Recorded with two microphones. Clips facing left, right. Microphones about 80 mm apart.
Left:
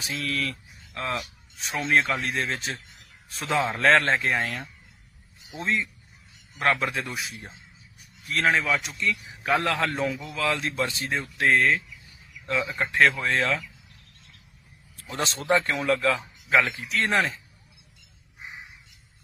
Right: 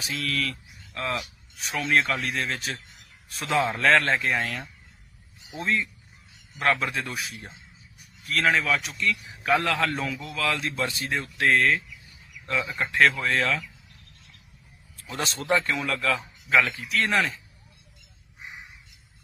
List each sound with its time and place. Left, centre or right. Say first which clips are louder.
0.0 s a man's voice: even; left
15.0 s speech: left 2 dB; left